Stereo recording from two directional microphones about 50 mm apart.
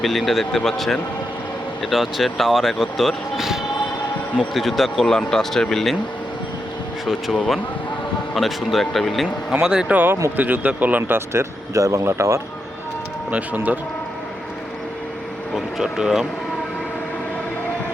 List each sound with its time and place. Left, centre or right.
0.0 s speech: centre
3.3 s basketball bounce: centre
4.4 s speech: centre
7.0 s speech: centre
8.4 s speech: centre
9.9 s speech: right
11.1 s speech: right
13.3 s speech: right
15.5 s speech: centre